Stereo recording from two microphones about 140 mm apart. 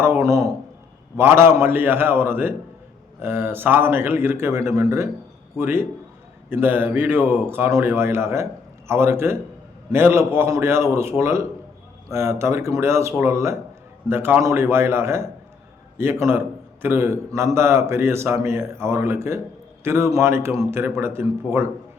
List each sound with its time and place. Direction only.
0.0 s a man's voice: 20° right (ahead or behind)